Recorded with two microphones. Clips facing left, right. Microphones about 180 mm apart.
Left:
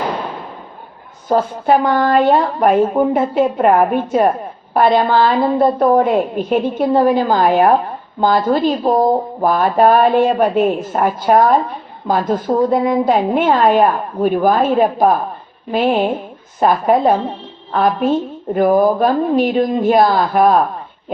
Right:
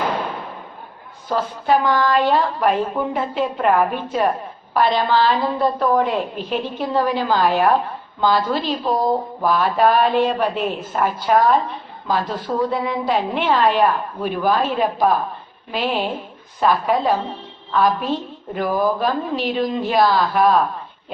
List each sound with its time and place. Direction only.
1.3 s speech: 50° left (ahead or behind)